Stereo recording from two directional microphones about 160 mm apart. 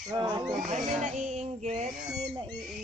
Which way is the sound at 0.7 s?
50° right (ahead or behind).